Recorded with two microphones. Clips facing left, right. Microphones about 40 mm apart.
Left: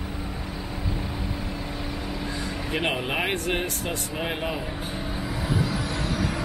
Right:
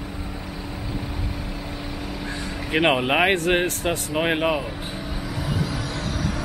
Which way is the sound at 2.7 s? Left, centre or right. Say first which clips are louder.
Right 8 dB; right.